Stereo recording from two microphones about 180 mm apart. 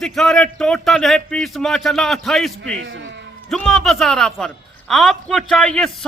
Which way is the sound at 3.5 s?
5° left (ahead or behind).